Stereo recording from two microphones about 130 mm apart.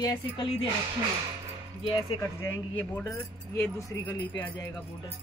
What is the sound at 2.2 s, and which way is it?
Speech, 20° left (ahead or behind).